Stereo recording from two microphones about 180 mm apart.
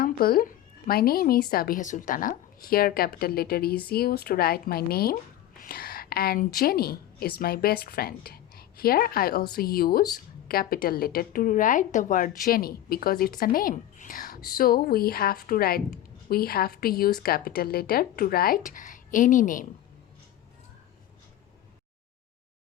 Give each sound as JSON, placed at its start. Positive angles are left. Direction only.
{"t": 0.0, "sound": "a woman's voice", "side_deg": 55}